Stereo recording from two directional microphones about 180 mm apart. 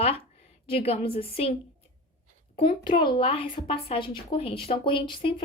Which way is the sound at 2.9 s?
25° left (ahead or behind).